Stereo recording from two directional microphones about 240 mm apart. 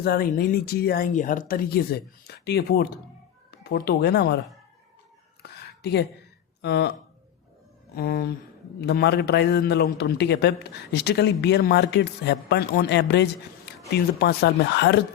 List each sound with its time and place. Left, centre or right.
0.0 s speech: left
5.4 s a sound: left
6.6 s speech: left
7.9 s speech: left